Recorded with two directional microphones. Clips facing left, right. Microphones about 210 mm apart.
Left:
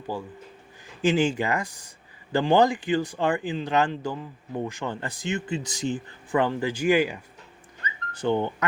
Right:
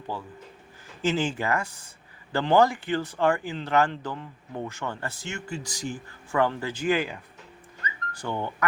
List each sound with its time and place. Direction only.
1.0 s speech: 15° left (ahead or behind)
8.1 s speech: 20° left (ahead or behind)